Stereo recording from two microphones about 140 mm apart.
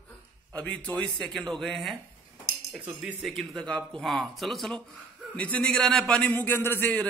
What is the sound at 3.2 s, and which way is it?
Speech, centre (ahead or behind).